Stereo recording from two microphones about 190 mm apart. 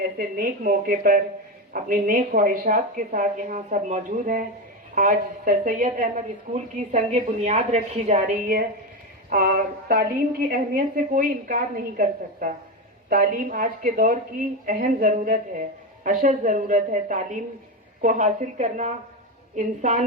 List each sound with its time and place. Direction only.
0.2 s a woman's voice: 50° right (ahead or behind)